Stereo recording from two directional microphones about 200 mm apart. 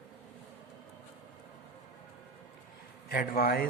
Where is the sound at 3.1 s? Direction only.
45° left (ahead or behind).